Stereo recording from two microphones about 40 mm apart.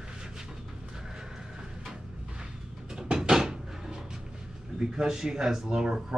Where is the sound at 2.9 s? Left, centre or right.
Centre.